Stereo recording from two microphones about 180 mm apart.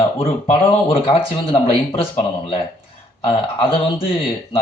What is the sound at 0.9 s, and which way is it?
Speech, 30° left (ahead or behind).